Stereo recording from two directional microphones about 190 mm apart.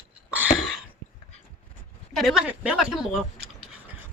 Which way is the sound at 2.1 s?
Centre (ahead or behind).